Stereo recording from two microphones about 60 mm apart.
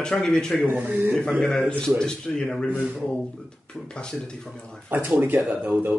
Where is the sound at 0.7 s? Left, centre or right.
Right.